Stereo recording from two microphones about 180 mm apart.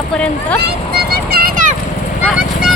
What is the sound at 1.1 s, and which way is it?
Vehicle, 55° right (ahead or behind).